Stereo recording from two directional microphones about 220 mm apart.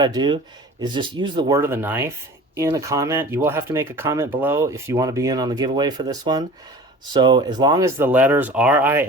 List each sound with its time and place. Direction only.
0.0 s speech: 20° right (ahead or behind)